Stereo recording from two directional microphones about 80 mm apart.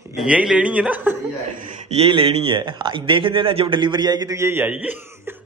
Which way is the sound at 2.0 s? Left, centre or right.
Right.